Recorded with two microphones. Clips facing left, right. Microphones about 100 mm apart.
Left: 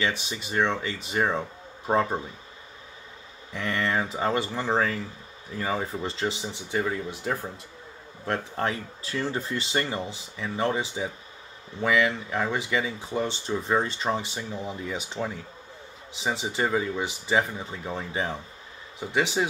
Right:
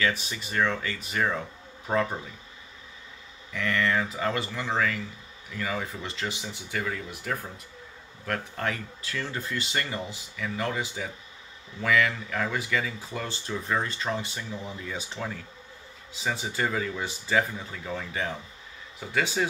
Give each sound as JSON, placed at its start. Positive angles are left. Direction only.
{"t": 0.0, "sound": "speech", "side_deg": 25}
{"t": 3.5, "sound": "speech", "side_deg": 25}